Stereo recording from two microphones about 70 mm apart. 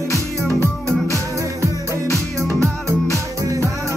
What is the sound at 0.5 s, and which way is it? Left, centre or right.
Music, right.